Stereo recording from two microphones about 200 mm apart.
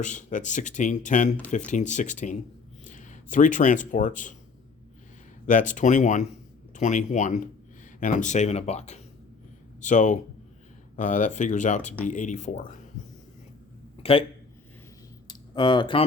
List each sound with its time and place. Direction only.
0.0 s speech: 40° left (ahead or behind)
5.5 s speech: 40° left (ahead or behind)
14.0 s a man's voice: 25° left (ahead or behind)
15.3 s speech: 20° left (ahead or behind)